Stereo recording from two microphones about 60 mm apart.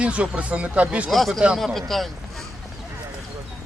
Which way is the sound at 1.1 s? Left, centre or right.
Centre.